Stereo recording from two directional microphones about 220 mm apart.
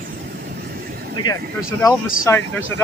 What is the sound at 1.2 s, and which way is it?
Speech, 20° left (ahead or behind).